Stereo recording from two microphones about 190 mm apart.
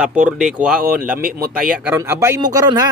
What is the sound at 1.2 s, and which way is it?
Speech, 50° right (ahead or behind).